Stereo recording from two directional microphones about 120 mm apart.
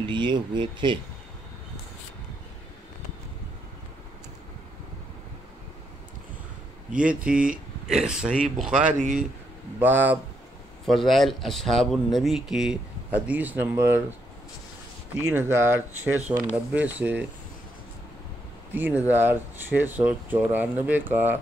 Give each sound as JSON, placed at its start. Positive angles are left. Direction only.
{"t": 0.0, "sound": "speech", "side_deg": -40}
{"t": 6.9, "sound": "speech", "side_deg": -10}
{"t": 10.9, "sound": "speech", "side_deg": 0}
{"t": 15.5, "sound": "speech", "side_deg": -20}
{"t": 18.7, "sound": "speech", "side_deg": -15}